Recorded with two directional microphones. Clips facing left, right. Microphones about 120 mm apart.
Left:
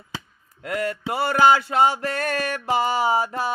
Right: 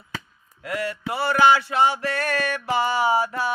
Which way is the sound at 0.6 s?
45° left (ahead or behind).